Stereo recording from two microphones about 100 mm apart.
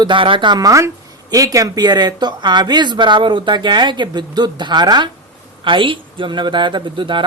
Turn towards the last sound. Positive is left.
turn(degrees=-55)  # may be behind; listen again after turning